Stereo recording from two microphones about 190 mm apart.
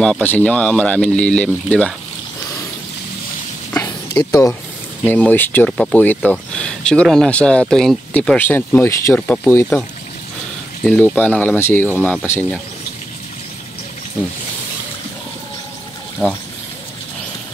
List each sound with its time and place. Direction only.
0.0 s speech: 5° left (ahead or behind)
3.7 s a sound: 15° left (ahead or behind)
5.0 s speech: 10° left (ahead or behind)
10.8 s speech: centre (ahead or behind)